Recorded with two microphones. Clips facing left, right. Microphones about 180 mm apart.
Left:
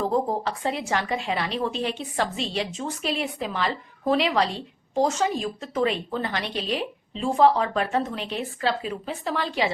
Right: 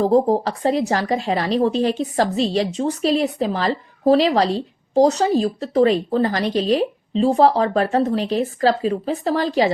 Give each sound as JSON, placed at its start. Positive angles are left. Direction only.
{"t": 0.0, "sound": "a woman's voice", "side_deg": -35}